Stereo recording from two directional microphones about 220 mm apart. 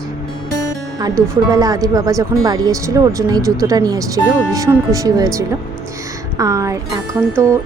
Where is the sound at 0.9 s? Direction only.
15° right (ahead or behind).